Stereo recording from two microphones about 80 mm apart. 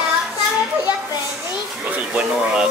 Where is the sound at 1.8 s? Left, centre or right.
Centre.